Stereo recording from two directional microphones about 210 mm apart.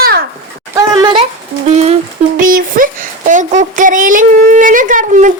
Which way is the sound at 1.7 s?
30° right (ahead or behind).